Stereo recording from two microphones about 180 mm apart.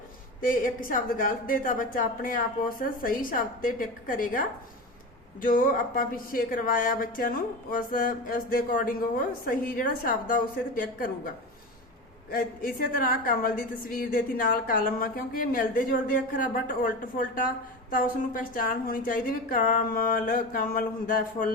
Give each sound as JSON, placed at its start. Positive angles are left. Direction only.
{"t": 0.4, "sound": "speech", "side_deg": 50}
{"t": 12.3, "sound": "speech", "side_deg": 50}